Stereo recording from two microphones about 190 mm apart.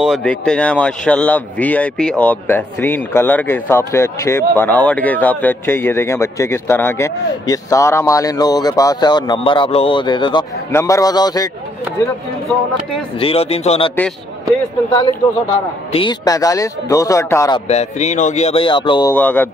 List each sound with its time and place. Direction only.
0.0 s a man's voice: centre (ahead or behind); by 11.5 s 20° left (ahead or behind)
13.2 s speech: 30° left (ahead or behind)
15.9 s speech: 25° left (ahead or behind)
17.6 s speech: 35° left (ahead or behind)
19.1 s speech: 10° left (ahead or behind)